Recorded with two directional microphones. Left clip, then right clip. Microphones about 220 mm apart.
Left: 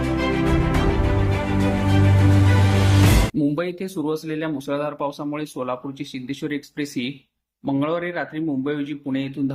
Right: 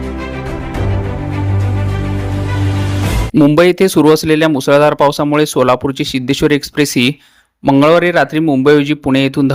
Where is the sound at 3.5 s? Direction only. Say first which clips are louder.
Right 17 dB; 45° right (ahead or behind).